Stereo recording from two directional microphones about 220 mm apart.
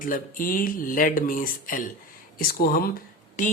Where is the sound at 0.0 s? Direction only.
40° left (ahead or behind).